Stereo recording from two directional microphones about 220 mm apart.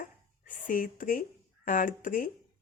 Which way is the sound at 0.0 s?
40° left (ahead or behind).